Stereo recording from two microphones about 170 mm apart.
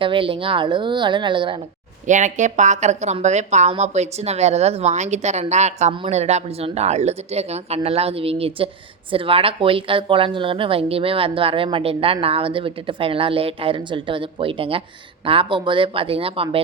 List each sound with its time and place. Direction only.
0.0 s speech: 30° right (ahead or behind)
2.0 s a woman's voice: 45° right (ahead or behind)